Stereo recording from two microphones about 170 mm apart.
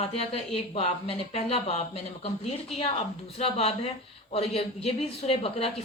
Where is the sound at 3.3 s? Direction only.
35° left (ahead or behind).